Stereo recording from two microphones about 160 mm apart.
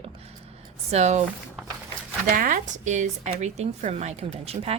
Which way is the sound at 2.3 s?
60° right (ahead or behind).